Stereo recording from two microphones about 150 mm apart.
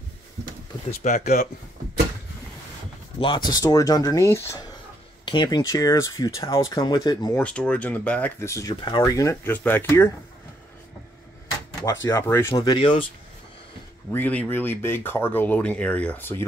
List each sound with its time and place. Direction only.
0.8 s speech: 55° left (ahead or behind)
3.2 s speech: 30° left (ahead or behind)
5.2 s speech: 30° left (ahead or behind)
7.3 s speech: 10° left (ahead or behind)
11.8 s speech: 20° left (ahead or behind)
12.6 s speech: 35° left (ahead or behind)
14.1 s speech: 10° left (ahead or behind)